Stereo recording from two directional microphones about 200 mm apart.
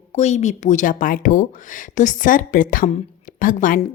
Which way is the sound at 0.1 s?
35° left (ahead or behind).